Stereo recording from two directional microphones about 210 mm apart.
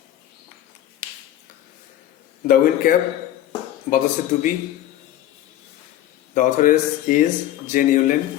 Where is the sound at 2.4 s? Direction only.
40° left (ahead or behind).